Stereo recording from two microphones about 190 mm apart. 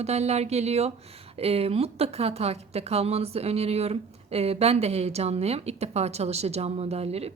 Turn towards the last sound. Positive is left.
turn(degrees=-35)  # may be behind; listen again after turning